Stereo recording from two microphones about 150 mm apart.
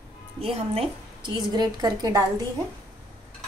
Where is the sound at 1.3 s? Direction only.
30° right (ahead or behind).